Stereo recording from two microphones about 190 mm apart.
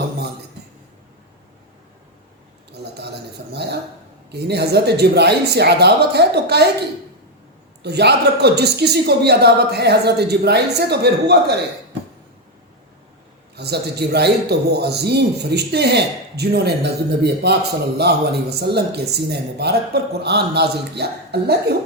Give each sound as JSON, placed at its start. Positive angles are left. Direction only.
{"t": 3.5, "sound": "a sound", "side_deg": -60}
{"t": 4.3, "sound": "speech", "side_deg": -60}
{"t": 7.8, "sound": "speech", "side_deg": -60}
{"t": 13.6, "sound": "speech", "side_deg": -60}